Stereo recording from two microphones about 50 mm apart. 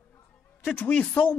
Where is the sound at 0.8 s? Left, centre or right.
Left.